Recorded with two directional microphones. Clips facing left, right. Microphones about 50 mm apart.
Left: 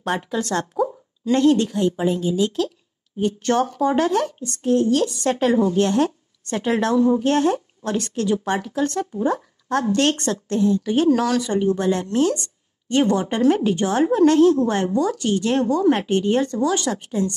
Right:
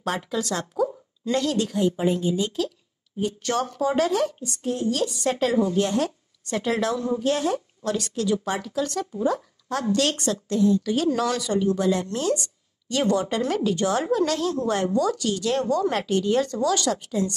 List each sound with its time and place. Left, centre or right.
0.0 s speech: left
2.0 s speech: centre
3.2 s a woman's voice: left
12.1 s speech: centre
12.4 s a woman's voice: left